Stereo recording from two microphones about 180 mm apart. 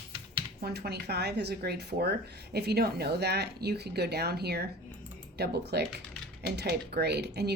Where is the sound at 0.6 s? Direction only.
65° right (ahead or behind).